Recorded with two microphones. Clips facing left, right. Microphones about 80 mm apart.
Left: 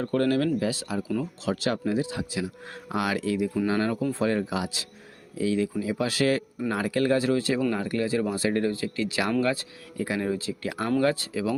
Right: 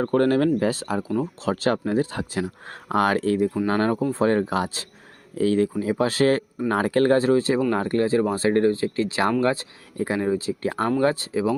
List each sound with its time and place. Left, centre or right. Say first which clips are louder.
0.0 s speech: right 5 dB; right
10.7 s speech: right 3 dB; right